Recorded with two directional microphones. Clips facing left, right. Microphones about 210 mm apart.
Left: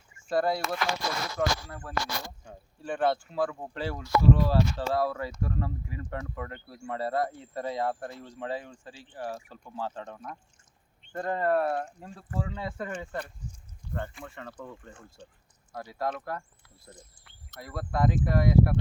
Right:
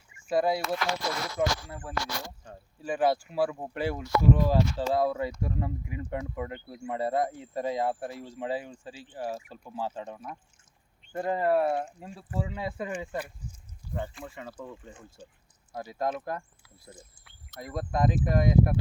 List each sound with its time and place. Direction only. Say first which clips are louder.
0.3 s speech: right 1 dB; 5° right (ahead or behind)
2.8 s speech: right 1 dB; 5° right (ahead or behind)
16.6 s speech: right 1 dB; 5° right (ahead or behind)
17.6 s speech: right 1 dB; 20° right (ahead or behind)